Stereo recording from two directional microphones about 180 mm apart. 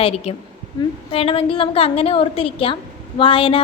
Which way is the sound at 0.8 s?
25° left (ahead or behind).